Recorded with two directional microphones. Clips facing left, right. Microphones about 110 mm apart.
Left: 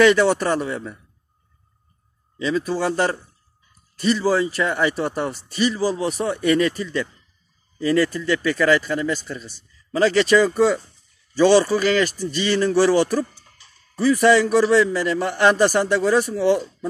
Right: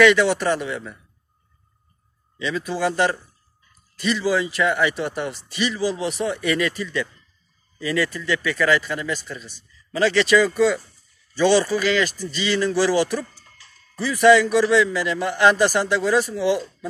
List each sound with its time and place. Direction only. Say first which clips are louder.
0.0 s a man's voice: left 1 dB; 40° left (ahead or behind)
2.3 s a man's voice: left 4 dB; 40° left (ahead or behind)
14.0 s a man's voice: even; 40° left (ahead or behind)